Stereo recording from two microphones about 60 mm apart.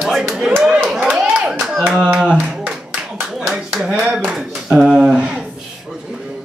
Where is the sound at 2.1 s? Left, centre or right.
Centre.